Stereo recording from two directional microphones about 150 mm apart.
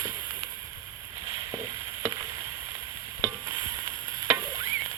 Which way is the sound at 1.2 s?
25° right (ahead or behind).